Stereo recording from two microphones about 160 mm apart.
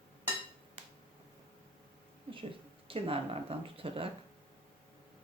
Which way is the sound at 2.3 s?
35° right (ahead or behind).